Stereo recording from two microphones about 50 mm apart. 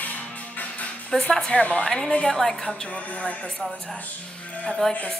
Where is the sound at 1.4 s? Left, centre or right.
Left.